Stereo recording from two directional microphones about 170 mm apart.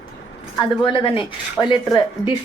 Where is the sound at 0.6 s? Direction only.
30° left (ahead or behind).